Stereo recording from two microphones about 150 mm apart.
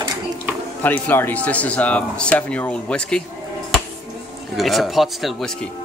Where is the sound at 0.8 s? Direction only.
10° left (ahead or behind).